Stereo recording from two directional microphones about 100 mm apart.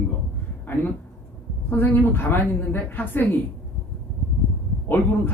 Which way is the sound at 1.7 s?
20° left (ahead or behind).